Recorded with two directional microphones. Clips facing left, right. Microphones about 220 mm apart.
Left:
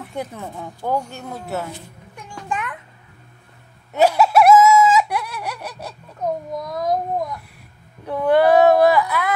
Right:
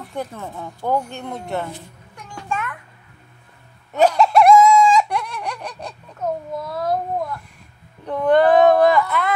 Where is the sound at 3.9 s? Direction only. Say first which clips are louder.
Even; 10° left (ahead or behind).